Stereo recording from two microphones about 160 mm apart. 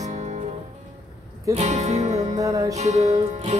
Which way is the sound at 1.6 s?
45° right (ahead or behind).